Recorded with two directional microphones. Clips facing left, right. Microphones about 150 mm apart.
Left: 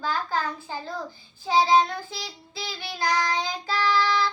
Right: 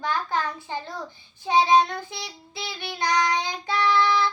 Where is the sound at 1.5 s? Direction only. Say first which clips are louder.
Right 1 dB; 20° right (ahead or behind).